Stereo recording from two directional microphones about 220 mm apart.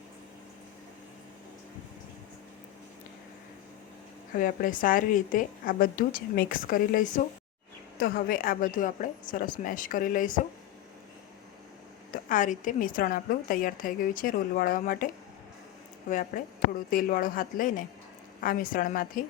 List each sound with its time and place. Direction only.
4.4 s a woman's voice: 40° left (ahead or behind)
12.1 s a woman's voice: 35° left (ahead or behind)